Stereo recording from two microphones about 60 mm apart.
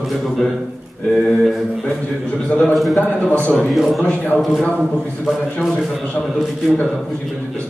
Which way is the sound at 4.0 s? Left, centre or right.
Left.